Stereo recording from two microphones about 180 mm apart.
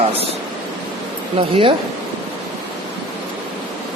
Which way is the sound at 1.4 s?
30° right (ahead or behind).